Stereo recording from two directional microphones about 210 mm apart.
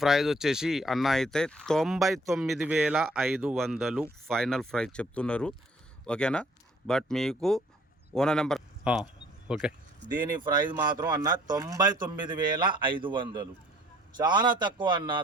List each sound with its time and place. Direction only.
0.0 s speech: centre (ahead or behind)
10.4 s speech: 20° right (ahead or behind)